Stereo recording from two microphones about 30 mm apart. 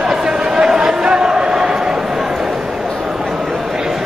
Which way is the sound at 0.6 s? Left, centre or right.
Right.